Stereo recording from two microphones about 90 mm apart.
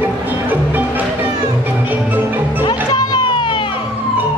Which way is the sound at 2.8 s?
50° left (ahead or behind).